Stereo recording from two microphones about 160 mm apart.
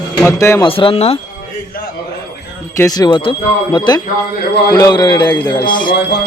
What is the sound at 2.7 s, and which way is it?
Speech, 20° left (ahead or behind).